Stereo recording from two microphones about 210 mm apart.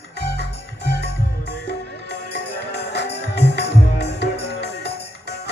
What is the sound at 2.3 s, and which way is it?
Music, 50° left (ahead or behind).